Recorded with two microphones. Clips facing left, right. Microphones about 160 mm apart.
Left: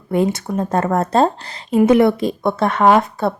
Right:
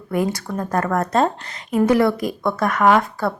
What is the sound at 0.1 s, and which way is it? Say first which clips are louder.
Speech: left 4 dB; 25° left (ahead or behind).